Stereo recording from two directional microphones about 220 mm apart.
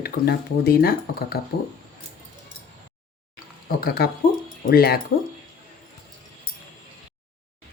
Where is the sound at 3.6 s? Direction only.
45° left (ahead or behind).